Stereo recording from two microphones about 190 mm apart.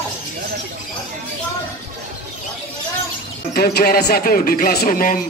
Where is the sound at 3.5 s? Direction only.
50° left (ahead or behind).